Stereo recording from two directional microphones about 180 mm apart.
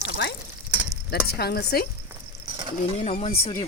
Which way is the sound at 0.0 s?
70° left (ahead or behind).